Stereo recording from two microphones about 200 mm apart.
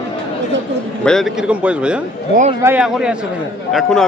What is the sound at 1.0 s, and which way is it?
A man's voice, centre (ahead or behind).